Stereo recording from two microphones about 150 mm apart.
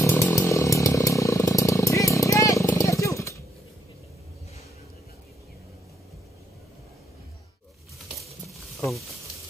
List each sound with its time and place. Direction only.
0.0 s chainsaw: 20° left (ahead or behind)